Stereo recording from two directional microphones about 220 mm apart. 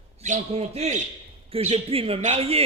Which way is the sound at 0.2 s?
30° right (ahead or behind).